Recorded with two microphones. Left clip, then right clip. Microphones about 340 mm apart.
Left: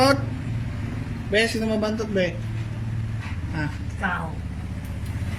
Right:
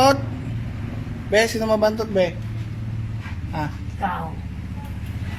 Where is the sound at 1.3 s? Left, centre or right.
Centre.